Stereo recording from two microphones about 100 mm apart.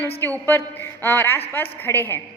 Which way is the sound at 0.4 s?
20° left (ahead or behind).